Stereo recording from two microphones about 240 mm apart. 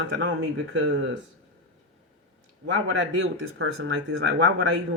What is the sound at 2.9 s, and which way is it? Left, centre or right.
Speech, right.